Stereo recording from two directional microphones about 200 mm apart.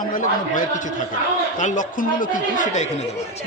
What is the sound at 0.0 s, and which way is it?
Speech, 40° left (ahead or behind).